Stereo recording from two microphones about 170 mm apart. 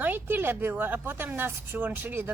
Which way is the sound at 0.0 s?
10° right (ahead or behind).